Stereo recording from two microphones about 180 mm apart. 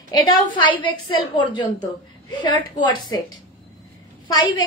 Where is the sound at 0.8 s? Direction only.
25° left (ahead or behind).